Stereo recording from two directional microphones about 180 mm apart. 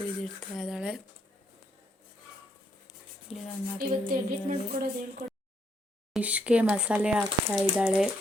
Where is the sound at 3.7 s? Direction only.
50° right (ahead or behind).